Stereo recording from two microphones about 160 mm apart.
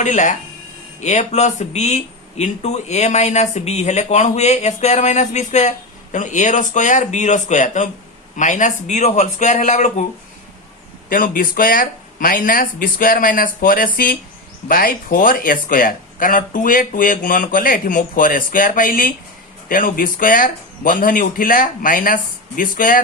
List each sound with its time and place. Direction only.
0.0 s speech: 50° left (ahead or behind)
11.1 s speech: 60° left (ahead or behind)